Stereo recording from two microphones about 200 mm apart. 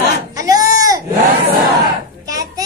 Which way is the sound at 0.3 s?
15° right (ahead or behind).